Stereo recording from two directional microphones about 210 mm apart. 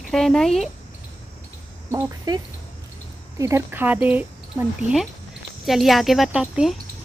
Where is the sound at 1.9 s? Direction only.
20° right (ahead or behind).